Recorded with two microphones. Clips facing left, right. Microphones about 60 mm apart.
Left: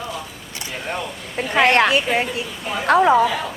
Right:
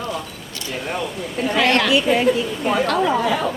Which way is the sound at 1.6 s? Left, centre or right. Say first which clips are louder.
Left 2 dB; left.